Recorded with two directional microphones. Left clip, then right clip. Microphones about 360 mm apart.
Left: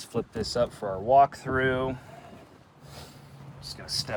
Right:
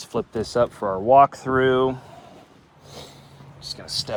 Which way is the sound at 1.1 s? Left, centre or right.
Centre.